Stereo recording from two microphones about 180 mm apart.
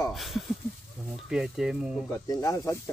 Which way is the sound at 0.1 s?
Centre (ahead or behind).